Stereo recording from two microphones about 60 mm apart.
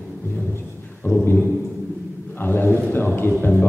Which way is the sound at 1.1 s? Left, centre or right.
Left.